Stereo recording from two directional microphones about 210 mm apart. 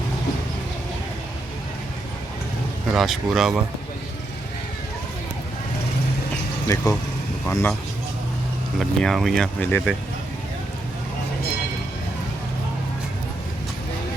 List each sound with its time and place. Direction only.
2.9 s speech: centre (ahead or behind)
6.7 s speech: 15° left (ahead or behind)
9.0 s speech: centre (ahead or behind)